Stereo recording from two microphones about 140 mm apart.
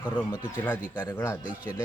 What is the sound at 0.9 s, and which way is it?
Speech, 25° left (ahead or behind).